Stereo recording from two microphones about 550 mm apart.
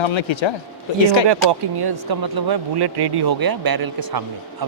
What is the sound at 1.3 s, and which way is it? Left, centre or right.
Speech, right.